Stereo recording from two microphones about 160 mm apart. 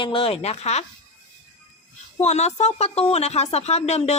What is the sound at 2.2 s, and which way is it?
A woman's voice, 45° left (ahead or behind).